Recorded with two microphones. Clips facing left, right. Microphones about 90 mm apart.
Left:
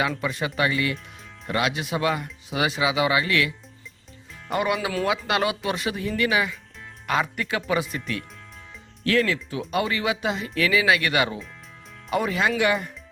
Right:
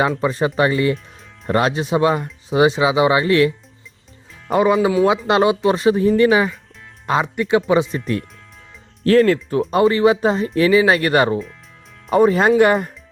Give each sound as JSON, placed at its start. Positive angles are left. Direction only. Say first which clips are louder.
{"t": 0.2, "sound": "speech", "louder": "right 8 dB", "side_deg": -35}
{"t": 4.5, "sound": "speech", "louder": "right 9 dB", "side_deg": -30}
{"t": 9.0, "sound": "speech", "louder": "right 9 dB", "side_deg": -40}